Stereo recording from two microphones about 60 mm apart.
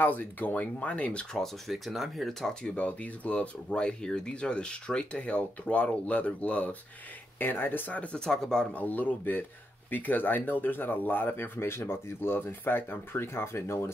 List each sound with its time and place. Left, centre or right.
0.0 s speech: left
1.7 s speech: centre
2.7 s speech: left
7.3 s speech: left
8.2 s speech: centre
8.7 s speech: left